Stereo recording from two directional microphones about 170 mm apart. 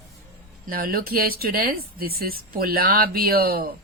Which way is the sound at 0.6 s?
60° right (ahead or behind).